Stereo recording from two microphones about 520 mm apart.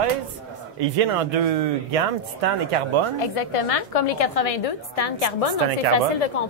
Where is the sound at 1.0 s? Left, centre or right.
Right.